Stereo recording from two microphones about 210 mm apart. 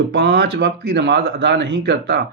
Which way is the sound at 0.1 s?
55° right (ahead or behind).